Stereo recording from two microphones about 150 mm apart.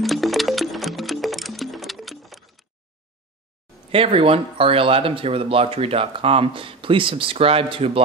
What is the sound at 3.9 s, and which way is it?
Speech, 40° right (ahead or behind).